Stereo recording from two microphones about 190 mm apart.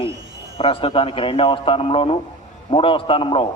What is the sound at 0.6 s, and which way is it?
A man's voice, 30° left (ahead or behind).